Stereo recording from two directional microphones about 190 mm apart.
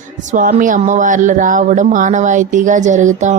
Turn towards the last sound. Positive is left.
turn(degrees=-40)  # may be behind; listen again after turning